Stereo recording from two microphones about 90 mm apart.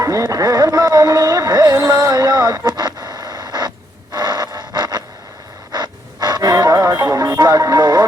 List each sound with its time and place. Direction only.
0.0 s music: 35° right (ahead or behind)
4.1 s a sound: 50° right (ahead or behind)
5.7 s music: 50° right (ahead or behind)